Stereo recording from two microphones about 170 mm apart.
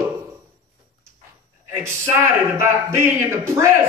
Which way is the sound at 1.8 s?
15° right (ahead or behind).